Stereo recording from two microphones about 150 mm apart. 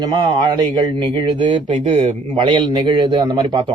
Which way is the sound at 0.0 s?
30° right (ahead or behind).